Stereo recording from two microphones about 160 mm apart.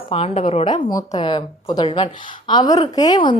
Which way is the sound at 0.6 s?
25° left (ahead or behind).